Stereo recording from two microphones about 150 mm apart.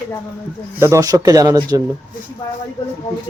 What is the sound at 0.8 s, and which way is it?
Speech, 20° right (ahead or behind).